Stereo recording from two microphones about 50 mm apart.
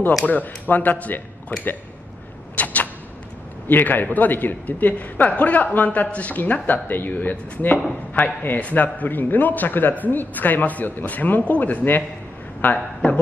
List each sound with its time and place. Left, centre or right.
0.2 s a man's voice: left
2.5 s a sound: left
3.6 s a man's voice: left